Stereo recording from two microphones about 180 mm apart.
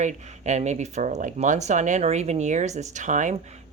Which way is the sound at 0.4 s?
40° right (ahead or behind).